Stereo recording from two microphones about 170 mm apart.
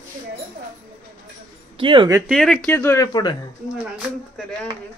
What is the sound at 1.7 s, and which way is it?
Speech, 30° right (ahead or behind).